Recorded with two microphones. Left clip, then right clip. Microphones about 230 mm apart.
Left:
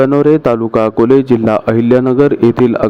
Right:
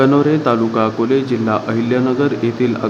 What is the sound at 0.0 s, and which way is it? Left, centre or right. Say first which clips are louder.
A man's voice: left 4 dB; left.